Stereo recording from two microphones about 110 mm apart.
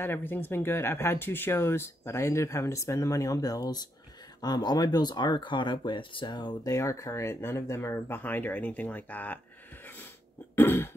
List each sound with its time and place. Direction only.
0.0 s speech: 20° left (ahead or behind)
10.5 s cough: 20° left (ahead or behind)